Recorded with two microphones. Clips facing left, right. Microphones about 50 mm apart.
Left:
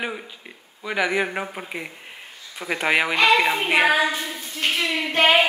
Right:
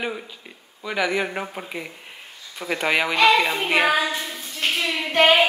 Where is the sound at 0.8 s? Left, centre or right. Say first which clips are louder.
Left 1 dB; centre.